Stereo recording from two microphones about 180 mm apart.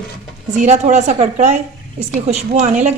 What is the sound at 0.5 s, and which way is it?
A woman's voice, 40° right (ahead or behind).